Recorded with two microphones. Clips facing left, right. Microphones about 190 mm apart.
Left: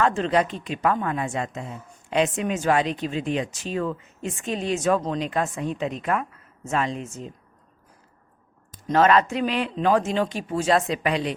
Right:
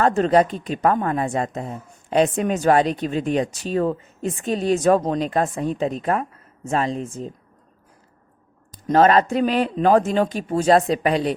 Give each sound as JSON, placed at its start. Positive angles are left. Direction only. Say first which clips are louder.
{"t": 0.0, "sound": "a woman's voice", "louder": "right 5 dB", "side_deg": -40}
{"t": 8.9, "sound": "a woman's voice", "louder": "right 3 dB", "side_deg": -40}